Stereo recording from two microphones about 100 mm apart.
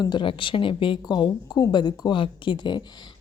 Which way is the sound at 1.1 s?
40° left (ahead or behind).